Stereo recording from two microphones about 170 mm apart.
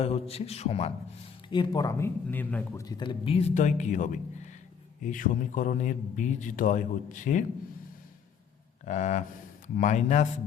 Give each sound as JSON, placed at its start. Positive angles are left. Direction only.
{"t": 0.0, "sound": "a man's voice", "side_deg": 35}
{"t": 2.8, "sound": "a man's voice", "side_deg": 25}
{"t": 8.9, "sound": "a man's voice", "side_deg": 45}